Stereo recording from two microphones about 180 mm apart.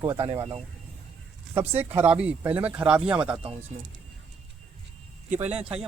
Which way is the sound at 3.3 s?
30° right (ahead or behind).